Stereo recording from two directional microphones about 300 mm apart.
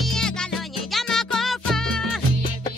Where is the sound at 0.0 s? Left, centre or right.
Centre.